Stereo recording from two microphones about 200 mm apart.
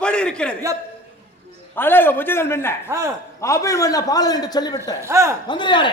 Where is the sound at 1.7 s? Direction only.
10° left (ahead or behind).